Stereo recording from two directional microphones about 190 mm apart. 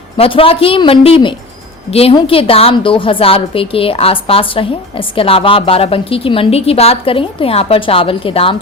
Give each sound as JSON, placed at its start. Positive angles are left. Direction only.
{"t": 0.2, "sound": "a woman's voice", "side_deg": 30}